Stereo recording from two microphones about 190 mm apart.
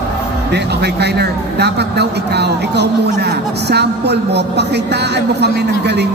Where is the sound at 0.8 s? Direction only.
60° right (ahead or behind).